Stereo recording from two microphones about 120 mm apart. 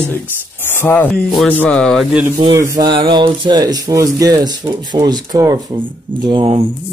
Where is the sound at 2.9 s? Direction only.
40° right (ahead or behind).